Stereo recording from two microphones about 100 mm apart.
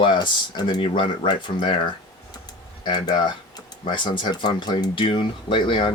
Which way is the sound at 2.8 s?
50° left (ahead or behind).